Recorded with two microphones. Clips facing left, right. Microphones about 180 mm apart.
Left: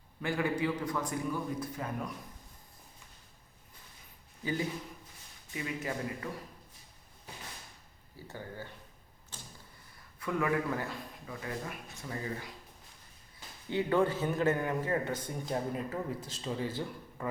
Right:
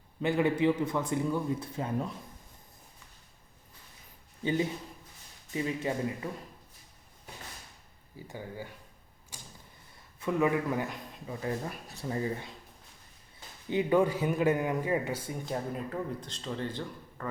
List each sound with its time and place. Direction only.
0.2 s a man's voice: 20° right (ahead or behind)
4.4 s a man's voice: 25° right (ahead or behind)
8.1 s a man's voice: 15° right (ahead or behind)
9.3 s door: 10° right (ahead or behind)
10.2 s a man's voice: 20° right (ahead or behind)
11.4 s speech: 35° right (ahead or behind)
13.7 s a man's voice: 15° right (ahead or behind); by 17.2 s 5° left (ahead or behind)